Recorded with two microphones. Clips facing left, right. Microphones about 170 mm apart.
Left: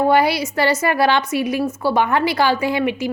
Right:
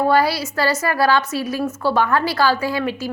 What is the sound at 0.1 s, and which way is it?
A woman's voice, 20° left (ahead or behind).